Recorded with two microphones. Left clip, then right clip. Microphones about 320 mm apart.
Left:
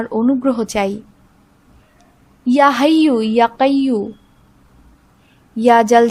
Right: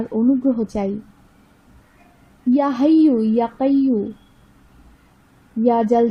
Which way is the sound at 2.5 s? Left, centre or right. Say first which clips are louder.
Left 5 dB; left.